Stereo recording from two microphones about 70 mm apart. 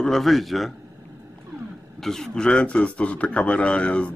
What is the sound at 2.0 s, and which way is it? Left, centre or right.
A man's voice, centre.